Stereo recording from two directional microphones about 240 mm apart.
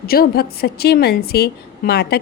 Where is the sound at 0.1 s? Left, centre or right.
Left.